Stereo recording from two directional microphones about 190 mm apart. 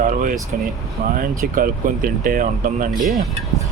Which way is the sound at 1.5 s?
45° right (ahead or behind).